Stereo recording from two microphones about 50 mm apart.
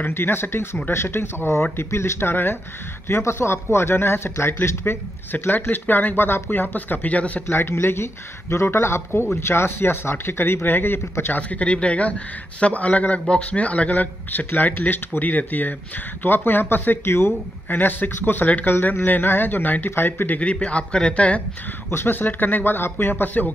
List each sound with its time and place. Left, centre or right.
0.1 s speech: left
3.1 s speech: left
7.1 s a man's voice: left
7.4 s speech: left
11.3 s a man's voice: left
17.6 s speech: left
20.3 s a man's voice: left
21.9 s speech: left